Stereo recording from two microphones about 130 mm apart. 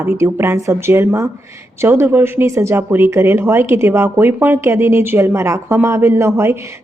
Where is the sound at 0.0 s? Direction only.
20° right (ahead or behind).